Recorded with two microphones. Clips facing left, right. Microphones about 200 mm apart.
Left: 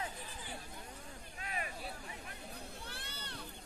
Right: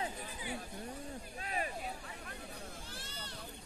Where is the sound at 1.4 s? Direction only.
35° right (ahead or behind).